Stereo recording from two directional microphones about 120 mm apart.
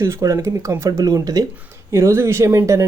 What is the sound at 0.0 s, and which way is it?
Speech, 25° right (ahead or behind).